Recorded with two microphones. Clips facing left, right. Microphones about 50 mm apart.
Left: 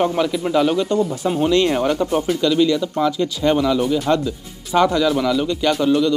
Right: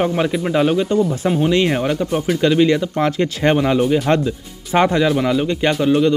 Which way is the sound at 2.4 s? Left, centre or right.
Right.